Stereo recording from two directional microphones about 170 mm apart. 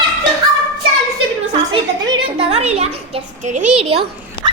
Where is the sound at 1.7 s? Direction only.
35° right (ahead or behind).